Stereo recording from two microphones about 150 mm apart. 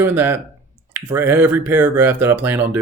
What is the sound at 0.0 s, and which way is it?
Speech, 15° right (ahead or behind).